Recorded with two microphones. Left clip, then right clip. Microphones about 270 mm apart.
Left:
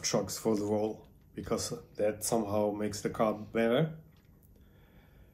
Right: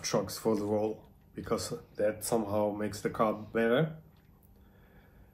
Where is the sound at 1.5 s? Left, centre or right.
Centre.